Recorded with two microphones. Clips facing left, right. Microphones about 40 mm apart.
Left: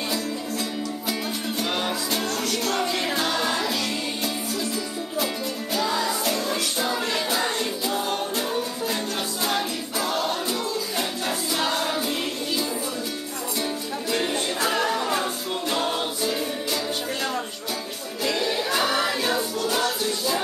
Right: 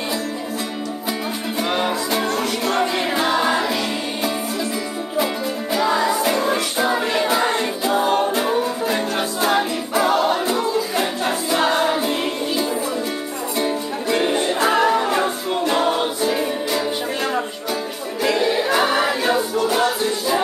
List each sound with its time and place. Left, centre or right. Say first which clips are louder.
1.6 s music: right 7 dB; centre
5.2 s music: right 6 dB; centre
18.3 s choir: right 6 dB; right
19.5 s music: right 6 dB; right